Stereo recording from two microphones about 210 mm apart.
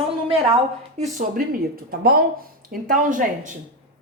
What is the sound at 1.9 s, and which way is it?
Speech, 45° right (ahead or behind).